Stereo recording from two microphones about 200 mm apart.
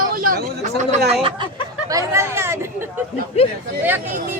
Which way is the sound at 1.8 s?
15° right (ahead or behind).